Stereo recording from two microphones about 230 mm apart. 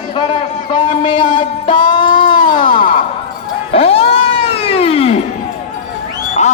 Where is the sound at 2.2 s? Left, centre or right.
Left.